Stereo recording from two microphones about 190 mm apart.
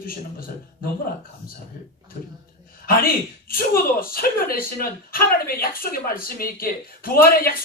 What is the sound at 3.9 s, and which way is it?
Speech, 50° left (ahead or behind).